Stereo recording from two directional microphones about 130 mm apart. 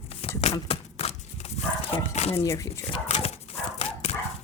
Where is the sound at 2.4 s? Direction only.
20° left (ahead or behind).